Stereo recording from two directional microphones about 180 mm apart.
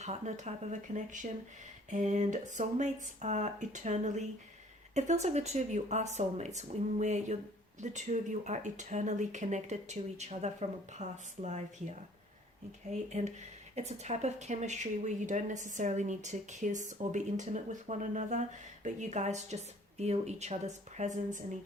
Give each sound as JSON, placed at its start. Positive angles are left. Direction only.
{"t": 0.0, "sound": "speech", "side_deg": -40}